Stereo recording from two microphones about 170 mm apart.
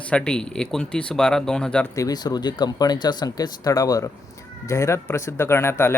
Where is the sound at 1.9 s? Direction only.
20° left (ahead or behind).